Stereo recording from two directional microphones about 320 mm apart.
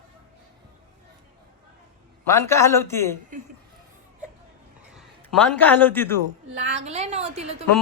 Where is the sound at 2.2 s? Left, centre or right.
Centre.